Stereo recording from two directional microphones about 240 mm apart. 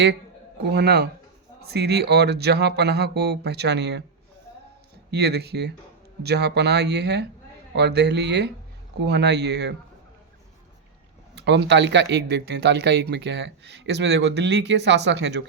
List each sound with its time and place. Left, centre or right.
0.6 s a man's voice: right
5.1 s speech: right
11.3 s speech: right